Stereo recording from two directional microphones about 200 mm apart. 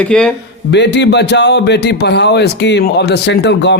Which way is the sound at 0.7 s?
60° left (ahead or behind).